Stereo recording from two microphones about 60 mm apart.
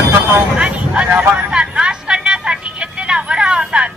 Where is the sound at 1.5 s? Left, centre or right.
Centre.